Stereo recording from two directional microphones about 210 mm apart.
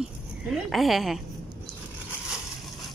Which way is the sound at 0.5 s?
Centre (ahead or behind).